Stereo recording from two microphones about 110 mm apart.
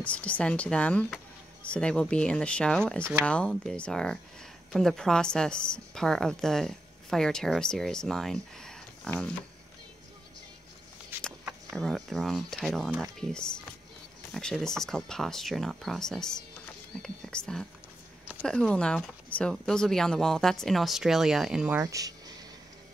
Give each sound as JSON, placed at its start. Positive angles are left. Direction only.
{"t": 0.0, "sound": "a woman's voice", "side_deg": 10}
{"t": 11.1, "sound": "a sound", "side_deg": -20}
{"t": 11.7, "sound": "a woman's voice", "side_deg": 5}
{"t": 21.8, "sound": "speech", "side_deg": -30}